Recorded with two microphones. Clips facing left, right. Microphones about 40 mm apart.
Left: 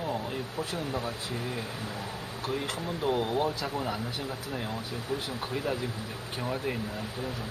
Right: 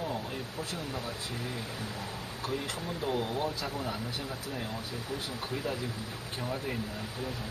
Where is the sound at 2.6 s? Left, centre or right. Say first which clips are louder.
Left 4 dB; left.